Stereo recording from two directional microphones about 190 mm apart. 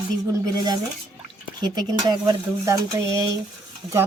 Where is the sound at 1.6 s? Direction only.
20° right (ahead or behind).